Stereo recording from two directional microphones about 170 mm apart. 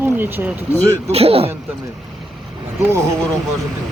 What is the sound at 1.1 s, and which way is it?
Speech, 35° right (ahead or behind).